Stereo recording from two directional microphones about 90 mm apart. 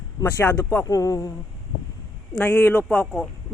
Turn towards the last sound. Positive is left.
turn(degrees=10)  # may be behind; listen again after turning